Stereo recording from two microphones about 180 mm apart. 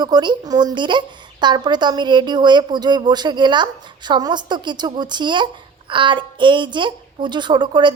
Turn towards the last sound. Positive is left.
turn(degrees=-25)  # may be behind; listen again after turning